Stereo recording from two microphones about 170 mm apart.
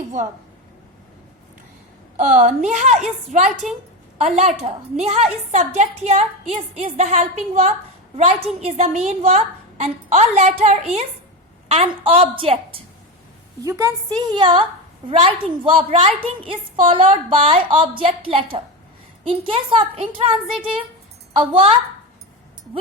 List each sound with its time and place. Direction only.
2.1 s a woman's voice: 45° right (ahead or behind)
3.2 s a woman's voice: centre (ahead or behind)
4.2 s a woman's voice: 40° right (ahead or behind)
13.6 s a woman's voice: 20° right (ahead or behind)
21.5 s a woman's voice: 35° right (ahead or behind)